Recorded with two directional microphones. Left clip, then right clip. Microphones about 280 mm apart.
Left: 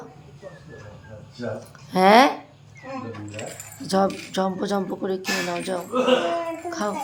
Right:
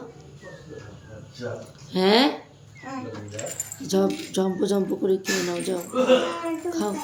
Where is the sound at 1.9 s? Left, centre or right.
Centre.